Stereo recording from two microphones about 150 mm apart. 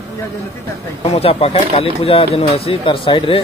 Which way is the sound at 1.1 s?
40° left (ahead or behind).